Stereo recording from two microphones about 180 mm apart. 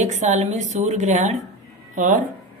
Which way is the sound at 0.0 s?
40° right (ahead or behind).